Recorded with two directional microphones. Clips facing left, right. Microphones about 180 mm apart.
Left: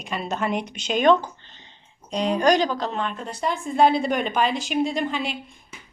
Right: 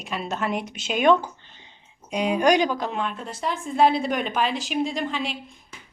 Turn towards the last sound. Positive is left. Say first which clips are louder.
# left 2 dB
turn(degrees=0)  # may be behind; listen again after turning